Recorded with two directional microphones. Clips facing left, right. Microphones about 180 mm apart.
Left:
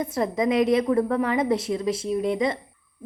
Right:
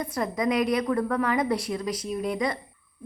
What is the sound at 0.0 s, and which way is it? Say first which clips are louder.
A woman's voice: left 3 dB; 25° left (ahead or behind).